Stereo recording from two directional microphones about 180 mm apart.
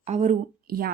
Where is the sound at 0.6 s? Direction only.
55° right (ahead or behind).